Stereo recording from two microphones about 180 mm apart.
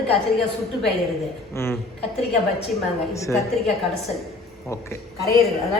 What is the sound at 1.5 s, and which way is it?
Speech, 15° left (ahead or behind).